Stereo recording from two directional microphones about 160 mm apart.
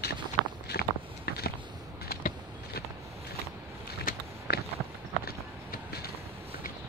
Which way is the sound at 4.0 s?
70° left (ahead or behind).